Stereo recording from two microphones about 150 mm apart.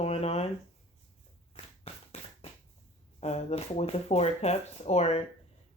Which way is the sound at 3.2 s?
45° left (ahead or behind).